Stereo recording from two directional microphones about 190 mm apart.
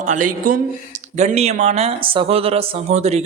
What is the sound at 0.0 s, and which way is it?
Speech, 45° right (ahead or behind).